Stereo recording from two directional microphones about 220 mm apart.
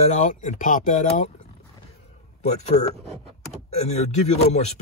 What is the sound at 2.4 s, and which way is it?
Speech, 30° left (ahead or behind).